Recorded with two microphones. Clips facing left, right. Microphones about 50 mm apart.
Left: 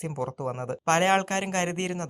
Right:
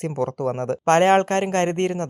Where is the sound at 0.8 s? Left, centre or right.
Right.